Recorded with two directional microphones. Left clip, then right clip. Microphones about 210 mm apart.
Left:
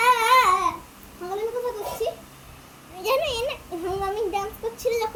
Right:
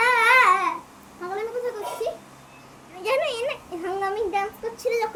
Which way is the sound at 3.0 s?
10° left (ahead or behind).